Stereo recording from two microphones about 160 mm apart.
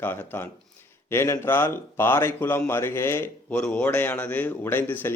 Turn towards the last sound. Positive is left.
turn(degrees=15)  # may be behind; listen again after turning